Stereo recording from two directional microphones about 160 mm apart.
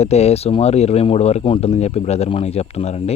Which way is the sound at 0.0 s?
40° left (ahead or behind).